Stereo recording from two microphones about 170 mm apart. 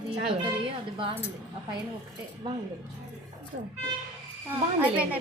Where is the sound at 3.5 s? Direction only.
90° right.